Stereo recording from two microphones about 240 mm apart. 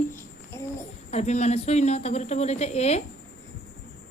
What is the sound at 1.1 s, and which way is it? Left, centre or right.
Speech, left.